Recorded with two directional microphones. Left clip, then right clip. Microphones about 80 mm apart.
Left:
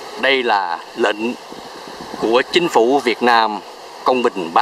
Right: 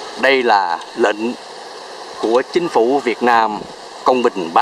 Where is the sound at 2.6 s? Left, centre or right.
Centre.